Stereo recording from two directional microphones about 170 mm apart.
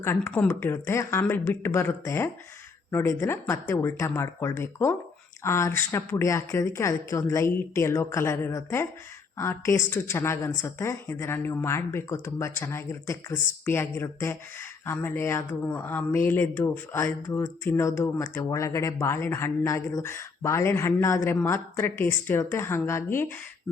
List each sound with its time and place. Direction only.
0.0 s a woman's voice: 10° left (ahead or behind)